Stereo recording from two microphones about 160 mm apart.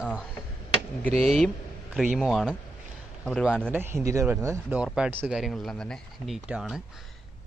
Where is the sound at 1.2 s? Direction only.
Centre (ahead or behind).